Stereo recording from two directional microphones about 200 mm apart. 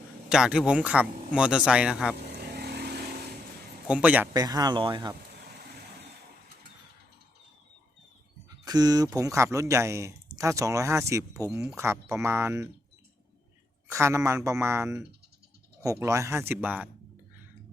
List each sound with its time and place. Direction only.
0.3 s speech: 5° right (ahead or behind)
2.4 s vehicle: 55° right (ahead or behind)
3.8 s speech: 5° right (ahead or behind)
4.4 s speech: 20° right (ahead or behind)
8.4 s speech: 20° right (ahead or behind)
13.9 s speech: 15° right (ahead or behind)